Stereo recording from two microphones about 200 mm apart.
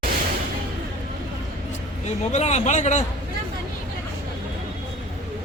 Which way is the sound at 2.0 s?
35° left (ahead or behind).